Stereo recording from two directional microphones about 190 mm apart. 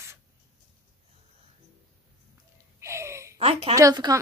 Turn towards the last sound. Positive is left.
turn(degrees=-20)  # may be behind; listen again after turning